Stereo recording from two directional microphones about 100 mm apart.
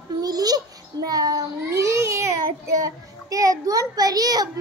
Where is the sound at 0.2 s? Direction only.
40° right (ahead or behind).